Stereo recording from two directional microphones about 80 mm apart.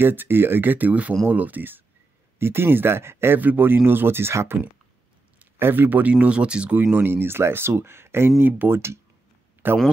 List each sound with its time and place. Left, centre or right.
0.0 s speech: right
5.6 s speech: right